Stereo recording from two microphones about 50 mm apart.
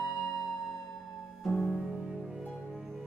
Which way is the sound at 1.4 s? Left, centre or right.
Centre.